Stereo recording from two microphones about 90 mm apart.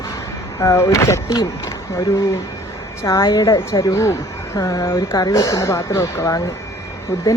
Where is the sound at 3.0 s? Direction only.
35° left (ahead or behind).